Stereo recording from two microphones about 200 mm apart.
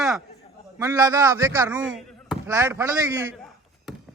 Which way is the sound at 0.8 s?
15° right (ahead or behind).